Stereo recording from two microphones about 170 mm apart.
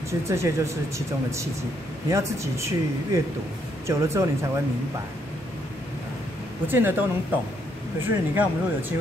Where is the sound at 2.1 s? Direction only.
15° right (ahead or behind).